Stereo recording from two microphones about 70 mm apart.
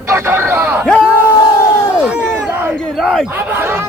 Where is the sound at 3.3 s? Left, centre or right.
Right.